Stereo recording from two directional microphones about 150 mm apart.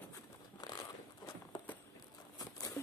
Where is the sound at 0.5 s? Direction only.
25° left (ahead or behind).